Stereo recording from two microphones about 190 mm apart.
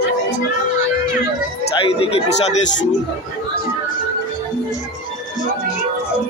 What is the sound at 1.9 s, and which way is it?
Speech, 30° left (ahead or behind).